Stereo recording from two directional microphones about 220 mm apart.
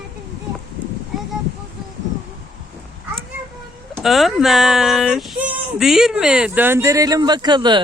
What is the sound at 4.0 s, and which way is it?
Speech, centre (ahead or behind).